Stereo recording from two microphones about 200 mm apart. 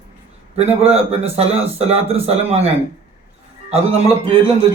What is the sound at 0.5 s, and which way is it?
Speech, 30° right (ahead or behind).